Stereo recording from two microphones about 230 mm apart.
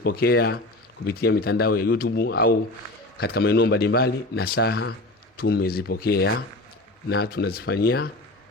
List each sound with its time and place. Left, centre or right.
0.0 s a man's voice: left